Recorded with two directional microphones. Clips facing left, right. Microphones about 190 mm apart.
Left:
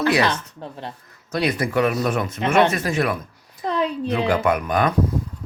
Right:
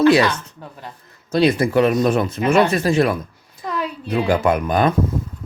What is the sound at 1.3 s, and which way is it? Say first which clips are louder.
Speech: right 6 dB; 30° right (ahead or behind).